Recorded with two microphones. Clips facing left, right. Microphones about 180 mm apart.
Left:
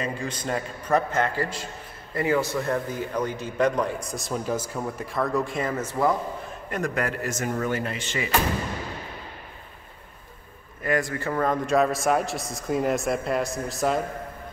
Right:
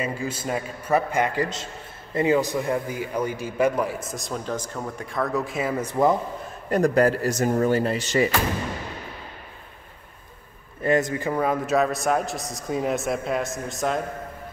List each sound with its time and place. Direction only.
0.0 s a man's voice: 5° right (ahead or behind)
6.7 s speech: 35° right (ahead or behind)
10.8 s a man's voice: 25° right (ahead or behind); by 14.0 s centre (ahead or behind)